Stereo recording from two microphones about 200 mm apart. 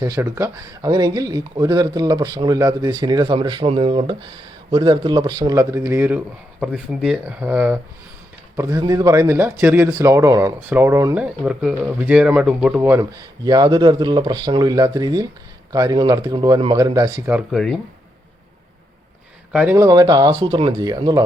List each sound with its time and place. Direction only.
0.0 s speech: 15° right (ahead or behind)
17.3 s speech: centre (ahead or behind)
19.5 s speech: 10° right (ahead or behind)